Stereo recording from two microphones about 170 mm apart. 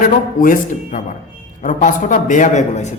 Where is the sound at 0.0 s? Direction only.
55° left (ahead or behind).